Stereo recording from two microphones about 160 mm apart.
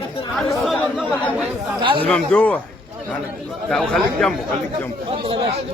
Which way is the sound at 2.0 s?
10° left (ahead or behind).